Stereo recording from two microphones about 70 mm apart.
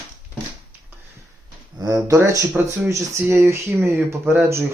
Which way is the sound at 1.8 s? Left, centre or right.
Right.